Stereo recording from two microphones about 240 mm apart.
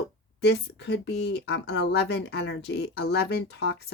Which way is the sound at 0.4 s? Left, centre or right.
Left.